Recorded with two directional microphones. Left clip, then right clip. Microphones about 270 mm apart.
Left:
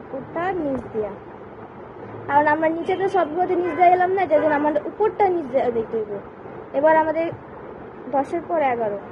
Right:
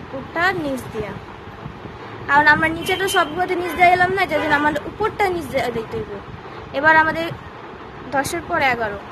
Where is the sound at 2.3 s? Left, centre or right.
Centre.